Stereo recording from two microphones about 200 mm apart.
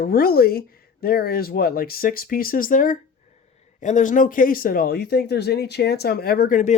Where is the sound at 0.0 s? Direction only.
50° left (ahead or behind).